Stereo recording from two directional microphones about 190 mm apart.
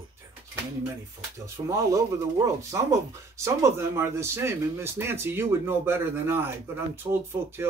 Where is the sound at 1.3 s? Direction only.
15° right (ahead or behind).